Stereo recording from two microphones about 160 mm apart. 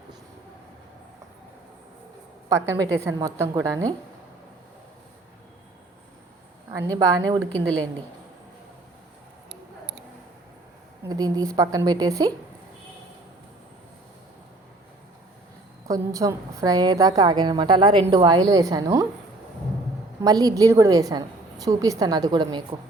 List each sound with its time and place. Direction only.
2.5 s a woman's voice: 20° right (ahead or behind)
6.7 s a woman's voice: 20° right (ahead or behind)
11.0 s a woman's voice: 25° right (ahead or behind)
15.9 s a woman's voice: 20° right (ahead or behind)
20.2 s a woman's voice: 20° right (ahead or behind)